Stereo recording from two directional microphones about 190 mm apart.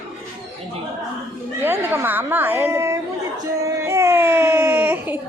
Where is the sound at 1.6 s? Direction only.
10° right (ahead or behind).